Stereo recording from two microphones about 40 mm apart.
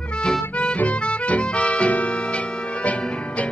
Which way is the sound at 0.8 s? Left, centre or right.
Left.